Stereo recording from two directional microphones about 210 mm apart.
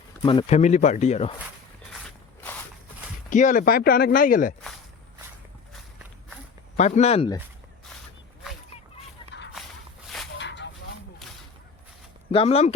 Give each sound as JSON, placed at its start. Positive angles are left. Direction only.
{"t": 0.2, "sound": "speech", "side_deg": 25}
{"t": 1.9, "sound": "a sound", "side_deg": 5}
{"t": 3.2, "sound": "speech", "side_deg": 35}
{"t": 5.7, "sound": "walk", "side_deg": -5}
{"t": 6.7, "sound": "speech", "side_deg": 30}
{"t": 10.3, "sound": "a sound", "side_deg": 55}
{"t": 12.3, "sound": "speech", "side_deg": 30}